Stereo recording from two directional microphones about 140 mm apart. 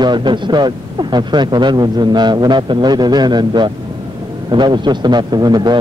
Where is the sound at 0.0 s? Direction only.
35° right (ahead or behind).